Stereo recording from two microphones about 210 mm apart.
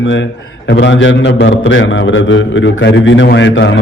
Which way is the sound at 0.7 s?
60° left (ahead or behind).